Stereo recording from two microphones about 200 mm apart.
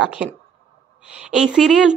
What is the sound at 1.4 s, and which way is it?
Speech, centre (ahead or behind).